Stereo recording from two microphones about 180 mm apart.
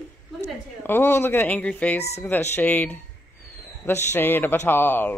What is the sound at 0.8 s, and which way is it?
Speech, 10° left (ahead or behind).